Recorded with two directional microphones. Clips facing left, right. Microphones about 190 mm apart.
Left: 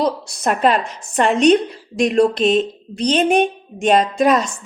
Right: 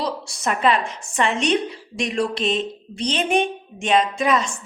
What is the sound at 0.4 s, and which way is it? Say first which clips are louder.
A woman's voice: left 4 dB; 40° left (ahead or behind).